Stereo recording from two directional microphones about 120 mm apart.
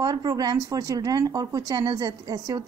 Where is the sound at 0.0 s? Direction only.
35° right (ahead or behind).